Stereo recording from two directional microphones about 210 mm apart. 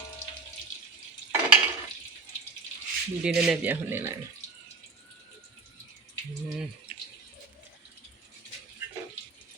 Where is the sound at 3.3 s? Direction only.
5° right (ahead or behind).